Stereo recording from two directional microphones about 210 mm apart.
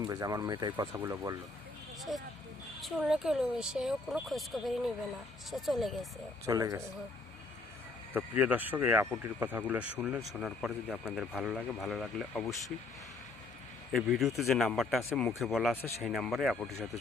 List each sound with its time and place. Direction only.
0.0 s speech: 15° right (ahead or behind)
2.1 s speech: centre (ahead or behind)
6.4 s speech: 15° right (ahead or behind)
8.1 s speech: 10° right (ahead or behind)
13.9 s speech: centre (ahead or behind)